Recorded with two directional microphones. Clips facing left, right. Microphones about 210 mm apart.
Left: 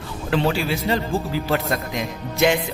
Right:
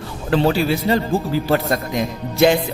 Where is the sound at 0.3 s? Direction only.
40° right (ahead or behind).